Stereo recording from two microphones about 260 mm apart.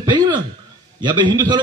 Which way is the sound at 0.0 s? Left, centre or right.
Centre.